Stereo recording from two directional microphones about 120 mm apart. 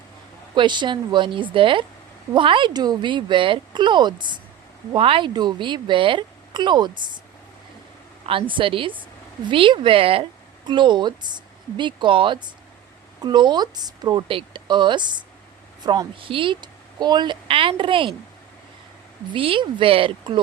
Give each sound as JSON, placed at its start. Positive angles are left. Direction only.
{"t": 0.5, "sound": "speech", "side_deg": -40}
{"t": 8.3, "sound": "speech", "side_deg": -45}
{"t": 10.7, "sound": "speech", "side_deg": -40}
{"t": 19.3, "sound": "speech", "side_deg": -45}